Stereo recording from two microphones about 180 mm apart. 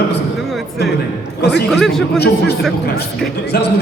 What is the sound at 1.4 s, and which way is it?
Speech, 65° left (ahead or behind).